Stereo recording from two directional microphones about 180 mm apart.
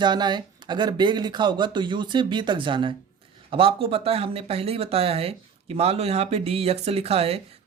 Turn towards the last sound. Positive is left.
turn(degrees=-35)  # may be behind; listen again after turning